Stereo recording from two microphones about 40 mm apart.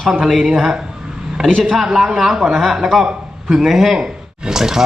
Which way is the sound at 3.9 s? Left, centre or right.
Centre.